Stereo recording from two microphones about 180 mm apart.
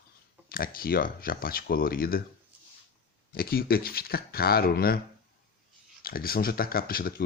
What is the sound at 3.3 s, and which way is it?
Speech, 55° left (ahead or behind).